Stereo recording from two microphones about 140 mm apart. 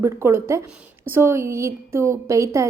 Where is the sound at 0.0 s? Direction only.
15° right (ahead or behind).